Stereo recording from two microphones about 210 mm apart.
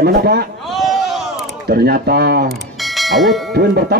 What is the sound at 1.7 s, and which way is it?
Speech, 50° right (ahead or behind).